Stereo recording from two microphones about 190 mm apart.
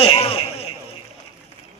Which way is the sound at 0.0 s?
30° left (ahead or behind).